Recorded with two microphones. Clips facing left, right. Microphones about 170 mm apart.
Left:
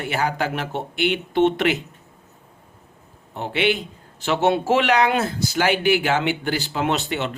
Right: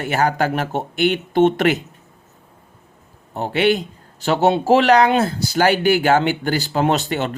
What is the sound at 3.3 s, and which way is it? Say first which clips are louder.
A man's voice: right 4 dB; 40° right (ahead or behind).